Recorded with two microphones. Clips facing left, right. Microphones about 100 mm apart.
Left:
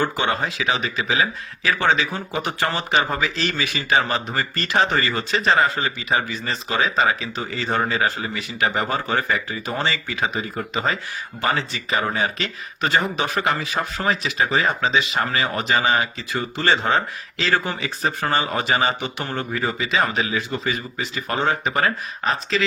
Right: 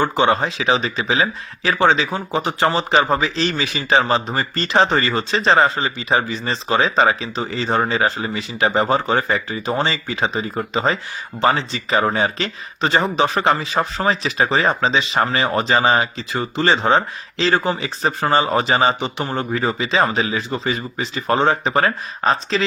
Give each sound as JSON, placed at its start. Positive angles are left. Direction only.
{"t": 0.0, "sound": "speech", "side_deg": -25}
{"t": 16.6, "sound": "speech", "side_deg": -20}